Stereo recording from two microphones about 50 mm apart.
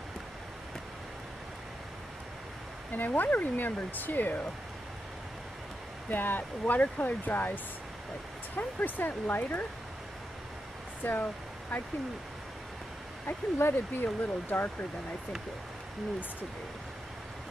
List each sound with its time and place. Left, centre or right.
2.9 s speech: left
6.0 s speech: left
11.0 s speech: left
13.3 s speech: left
14.0 s speech: left